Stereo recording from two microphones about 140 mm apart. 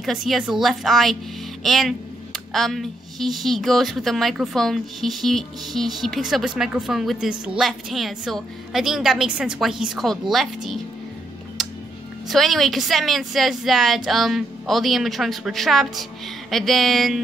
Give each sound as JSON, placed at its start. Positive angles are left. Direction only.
{"t": 0.0, "sound": "speech", "side_deg": 0}
{"t": 11.6, "sound": "music", "side_deg": 0}
{"t": 12.3, "sound": "speech", "side_deg": 0}